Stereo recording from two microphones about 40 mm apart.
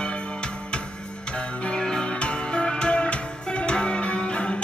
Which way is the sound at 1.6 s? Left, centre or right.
Left.